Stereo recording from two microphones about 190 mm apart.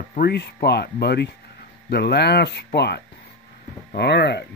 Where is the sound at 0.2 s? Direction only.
55° left (ahead or behind).